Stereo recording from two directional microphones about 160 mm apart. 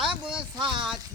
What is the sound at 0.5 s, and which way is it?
Speech, 30° right (ahead or behind).